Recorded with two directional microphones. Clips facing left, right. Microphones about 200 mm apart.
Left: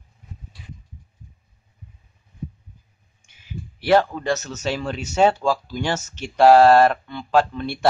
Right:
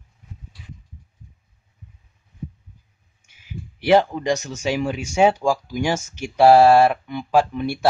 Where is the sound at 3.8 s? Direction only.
15° right (ahead or behind).